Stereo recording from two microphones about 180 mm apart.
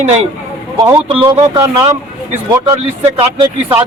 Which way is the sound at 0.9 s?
15° right (ahead or behind).